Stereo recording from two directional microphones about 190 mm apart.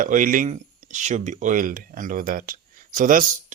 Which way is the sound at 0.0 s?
45° right (ahead or behind).